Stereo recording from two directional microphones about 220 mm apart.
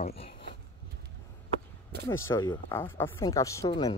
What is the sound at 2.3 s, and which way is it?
Speech, 15° left (ahead or behind).